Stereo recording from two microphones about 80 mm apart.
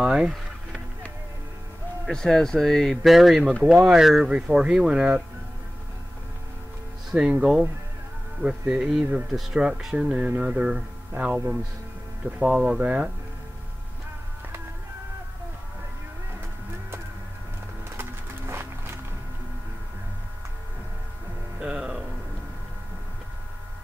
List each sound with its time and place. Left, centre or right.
0.0 s a sound: centre
2.0 s speech: centre
7.1 s speech: centre
10.1 s speech: right
18.5 s music: right
21.5 s music: centre